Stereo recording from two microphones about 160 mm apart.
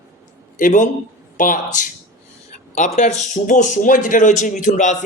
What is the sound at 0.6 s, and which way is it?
A man's voice, 55° left (ahead or behind).